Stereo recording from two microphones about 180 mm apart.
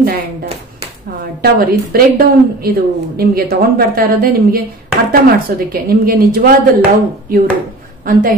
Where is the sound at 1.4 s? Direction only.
55° right (ahead or behind).